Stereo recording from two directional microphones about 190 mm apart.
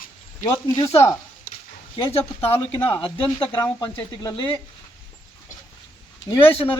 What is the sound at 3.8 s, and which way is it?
Speech, 20° left (ahead or behind).